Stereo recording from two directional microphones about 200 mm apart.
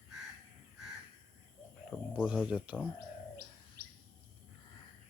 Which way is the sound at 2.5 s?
5° right (ahead or behind).